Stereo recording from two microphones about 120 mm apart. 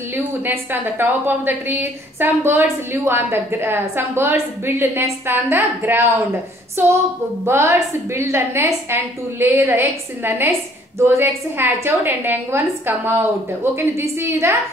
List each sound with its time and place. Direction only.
0.1 s a woman's voice: 20° right (ahead or behind)
6.8 s a sound: 20° right (ahead or behind)
7.4 s a woman's voice: 25° right (ahead or behind)